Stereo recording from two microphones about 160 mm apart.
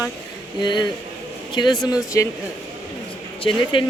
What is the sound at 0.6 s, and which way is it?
Speech, 30° left (ahead or behind).